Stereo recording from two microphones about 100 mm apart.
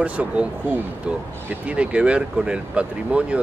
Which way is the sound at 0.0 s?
15° right (ahead or behind).